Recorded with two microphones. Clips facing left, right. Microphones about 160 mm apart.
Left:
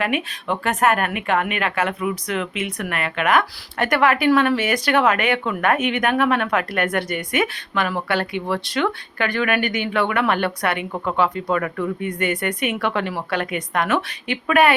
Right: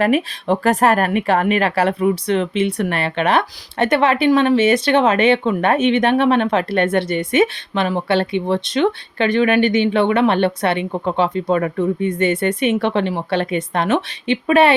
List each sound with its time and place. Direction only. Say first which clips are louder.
0.0 s speech: right 7 dB; 35° right (ahead or behind)